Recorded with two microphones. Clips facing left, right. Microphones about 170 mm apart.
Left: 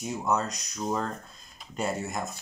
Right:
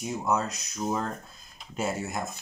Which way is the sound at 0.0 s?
Centre (ahead or behind).